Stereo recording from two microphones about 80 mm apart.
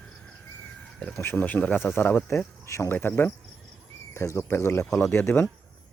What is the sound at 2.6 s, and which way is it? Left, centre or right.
Speech, left.